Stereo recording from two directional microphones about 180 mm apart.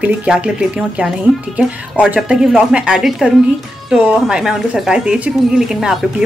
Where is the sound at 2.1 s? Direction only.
5° right (ahead or behind).